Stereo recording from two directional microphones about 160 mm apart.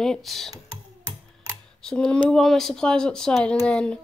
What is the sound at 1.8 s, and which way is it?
Speech, 5° left (ahead or behind).